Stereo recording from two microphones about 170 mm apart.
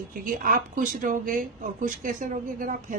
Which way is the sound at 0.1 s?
55° right (ahead or behind).